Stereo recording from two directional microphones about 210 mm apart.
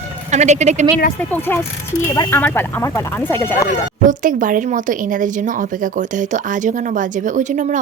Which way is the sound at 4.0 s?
40° right (ahead or behind).